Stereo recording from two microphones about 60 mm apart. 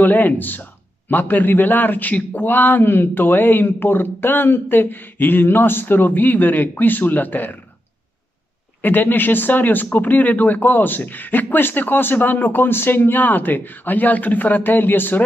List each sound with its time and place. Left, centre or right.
0.0 s a man's voice: left
8.8 s a man's voice: left